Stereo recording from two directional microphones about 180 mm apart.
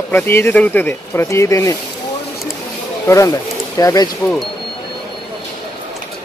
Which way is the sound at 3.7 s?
20° left (ahead or behind).